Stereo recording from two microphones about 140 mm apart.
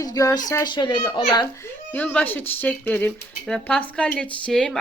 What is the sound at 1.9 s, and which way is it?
Speech, 10° left (ahead or behind).